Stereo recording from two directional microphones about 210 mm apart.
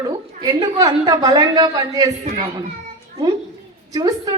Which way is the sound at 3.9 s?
15° right (ahead or behind).